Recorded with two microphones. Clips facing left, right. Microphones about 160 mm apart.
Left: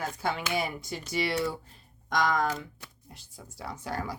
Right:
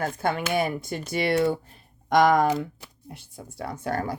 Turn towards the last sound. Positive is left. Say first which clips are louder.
# right 6 dB
turn(degrees=-55)  # may be behind; listen again after turning